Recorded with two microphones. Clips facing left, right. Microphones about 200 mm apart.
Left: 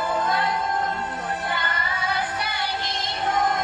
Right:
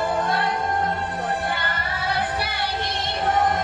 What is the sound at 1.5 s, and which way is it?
Music, 60° right (ahead or behind).